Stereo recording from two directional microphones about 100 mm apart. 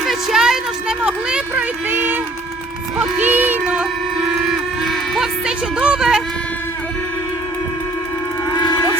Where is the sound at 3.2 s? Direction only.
20° right (ahead or behind).